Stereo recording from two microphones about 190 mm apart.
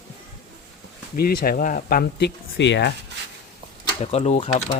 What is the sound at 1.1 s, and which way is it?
Speech, 50° left (ahead or behind).